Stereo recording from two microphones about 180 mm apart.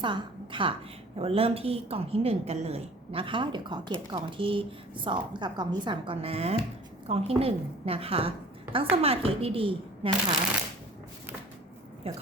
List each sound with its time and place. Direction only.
0.0 s a woman's voice: 25° right (ahead or behind)
12.1 s a woman's voice: 35° right (ahead or behind)